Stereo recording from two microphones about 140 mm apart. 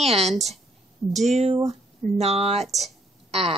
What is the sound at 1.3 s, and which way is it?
Speech, 50° right (ahead or behind).